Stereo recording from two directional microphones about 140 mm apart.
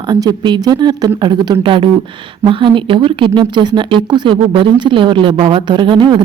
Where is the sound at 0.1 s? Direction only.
30° right (ahead or behind).